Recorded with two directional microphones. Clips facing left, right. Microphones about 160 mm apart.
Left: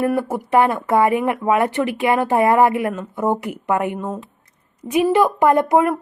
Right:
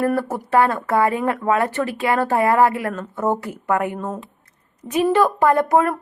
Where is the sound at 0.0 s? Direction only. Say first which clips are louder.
Left 1 dB; 15° left (ahead or behind).